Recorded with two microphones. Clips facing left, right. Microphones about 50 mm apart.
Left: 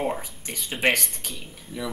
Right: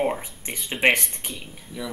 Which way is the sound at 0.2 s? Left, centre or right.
Right.